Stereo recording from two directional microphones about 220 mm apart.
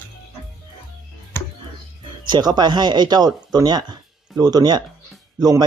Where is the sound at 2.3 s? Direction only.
20° right (ahead or behind).